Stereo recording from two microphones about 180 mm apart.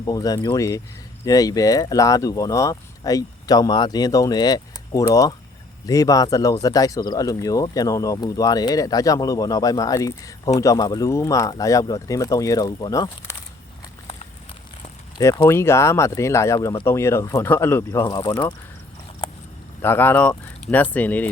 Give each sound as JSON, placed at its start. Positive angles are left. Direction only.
{"t": 0.0, "sound": "speech", "side_deg": 20}
{"t": 15.2, "sound": "speech", "side_deg": 15}
{"t": 19.8, "sound": "speech", "side_deg": 10}